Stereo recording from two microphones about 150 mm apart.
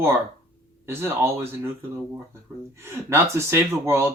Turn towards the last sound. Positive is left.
turn(degrees=-15)  # may be behind; listen again after turning